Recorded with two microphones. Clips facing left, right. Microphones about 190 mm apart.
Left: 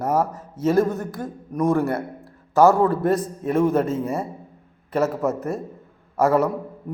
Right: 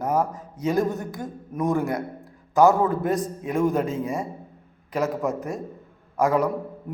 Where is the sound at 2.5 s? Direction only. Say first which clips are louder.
Left 2 dB; 15° right (ahead or behind).